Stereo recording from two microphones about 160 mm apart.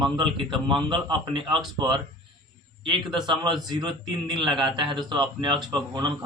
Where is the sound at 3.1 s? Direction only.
30° right (ahead or behind).